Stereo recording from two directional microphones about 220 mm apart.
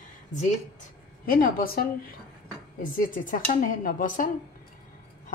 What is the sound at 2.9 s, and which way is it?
A woman's voice, 40° left (ahead or behind).